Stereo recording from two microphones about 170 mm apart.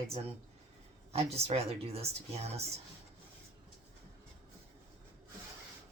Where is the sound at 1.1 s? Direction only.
35° right (ahead or behind).